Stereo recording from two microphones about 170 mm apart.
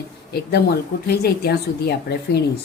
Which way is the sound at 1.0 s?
70° left (ahead or behind).